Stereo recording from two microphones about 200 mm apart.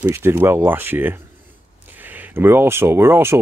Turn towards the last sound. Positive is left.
turn(degrees=-10)  # may be behind; listen again after turning